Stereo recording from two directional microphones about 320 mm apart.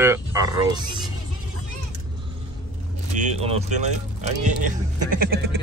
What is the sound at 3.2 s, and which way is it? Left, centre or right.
Speech, centre.